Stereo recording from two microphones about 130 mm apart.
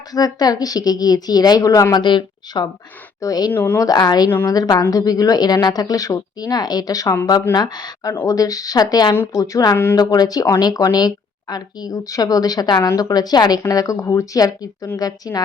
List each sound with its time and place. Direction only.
0.1 s speech: 30° left (ahead or behind)
3.5 s speech: 15° left (ahead or behind)
3.8 s speech: 30° left (ahead or behind)
4.3 s speech: 15° left (ahead or behind)
4.5 s speech: 30° left (ahead or behind)